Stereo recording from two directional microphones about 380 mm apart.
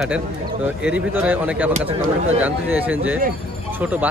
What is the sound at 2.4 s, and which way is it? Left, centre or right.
A man's voice, centre.